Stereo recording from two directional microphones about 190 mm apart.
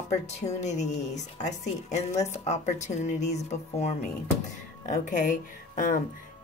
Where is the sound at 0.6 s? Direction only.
40° left (ahead or behind).